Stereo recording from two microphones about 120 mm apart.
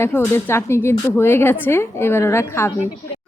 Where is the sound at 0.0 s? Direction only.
20° left (ahead or behind).